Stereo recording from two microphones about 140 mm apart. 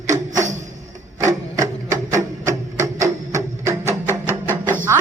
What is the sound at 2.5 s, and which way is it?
Music, 20° right (ahead or behind).